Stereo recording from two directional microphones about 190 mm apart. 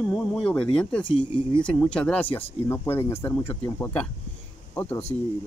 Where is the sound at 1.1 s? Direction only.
25° left (ahead or behind).